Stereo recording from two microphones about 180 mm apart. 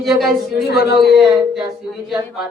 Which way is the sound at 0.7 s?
60° left (ahead or behind).